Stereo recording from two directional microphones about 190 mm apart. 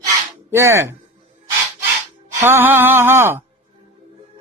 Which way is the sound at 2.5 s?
10° right (ahead or behind).